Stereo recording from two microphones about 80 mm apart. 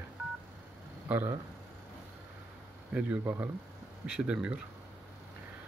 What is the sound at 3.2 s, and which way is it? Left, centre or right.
Speech, right.